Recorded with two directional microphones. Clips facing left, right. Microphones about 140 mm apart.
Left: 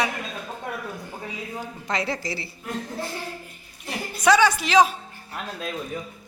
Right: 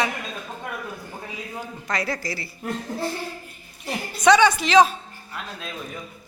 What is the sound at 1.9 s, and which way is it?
Speech, 20° left (ahead or behind).